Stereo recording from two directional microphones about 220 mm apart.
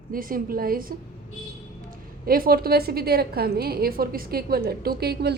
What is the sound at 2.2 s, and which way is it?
A woman's voice, 40° right (ahead or behind).